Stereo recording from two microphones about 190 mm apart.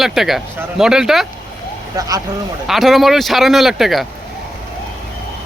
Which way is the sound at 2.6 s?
Centre (ahead or behind).